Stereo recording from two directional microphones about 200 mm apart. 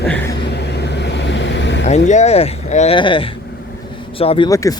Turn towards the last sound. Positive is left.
turn(degrees=15)  # may be behind; listen again after turning